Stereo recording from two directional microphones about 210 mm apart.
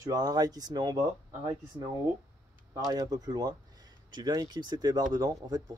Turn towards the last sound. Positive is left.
turn(degrees=-20)  # may be behind; listen again after turning